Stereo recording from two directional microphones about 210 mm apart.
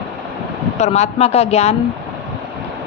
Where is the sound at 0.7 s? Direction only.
30° left (ahead or behind).